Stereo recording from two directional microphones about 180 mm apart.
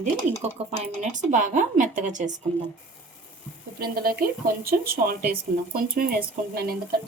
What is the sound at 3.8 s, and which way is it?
Speech, 55° right (ahead or behind).